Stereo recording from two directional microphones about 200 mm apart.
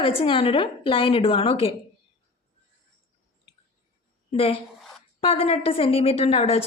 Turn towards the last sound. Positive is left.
turn(degrees=30)  # may be behind; listen again after turning